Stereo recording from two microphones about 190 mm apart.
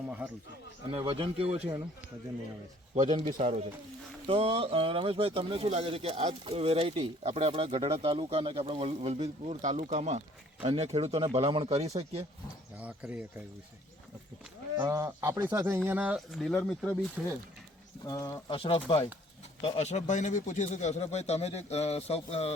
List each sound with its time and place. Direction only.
0.9 s speech: 30° right (ahead or behind)
2.9 s speech: 35° right (ahead or behind)
12.8 s speech: 5° right (ahead or behind)
14.8 s speech: 15° right (ahead or behind); by 17.3 s 5° left (ahead or behind)
18.0 s speech: 20° left (ahead or behind)